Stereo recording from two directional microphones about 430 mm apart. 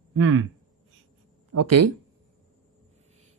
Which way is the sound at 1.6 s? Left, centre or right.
Right.